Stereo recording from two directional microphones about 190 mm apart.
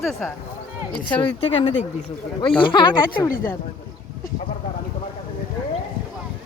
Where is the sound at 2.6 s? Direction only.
25° left (ahead or behind).